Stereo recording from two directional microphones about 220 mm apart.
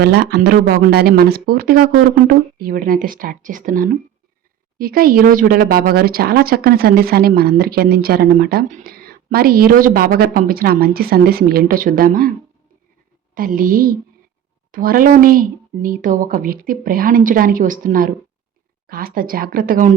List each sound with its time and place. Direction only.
0.0 s speech: 50° right (ahead or behind)
13.3 s speech: 40° right (ahead or behind)